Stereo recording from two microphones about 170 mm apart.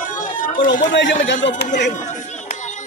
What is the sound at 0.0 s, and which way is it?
Run, 50° left (ahead or behind).